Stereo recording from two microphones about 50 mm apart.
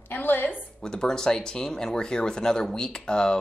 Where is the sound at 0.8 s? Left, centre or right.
Centre.